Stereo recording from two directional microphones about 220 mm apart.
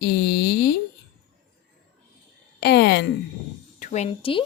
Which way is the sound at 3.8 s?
30° left (ahead or behind).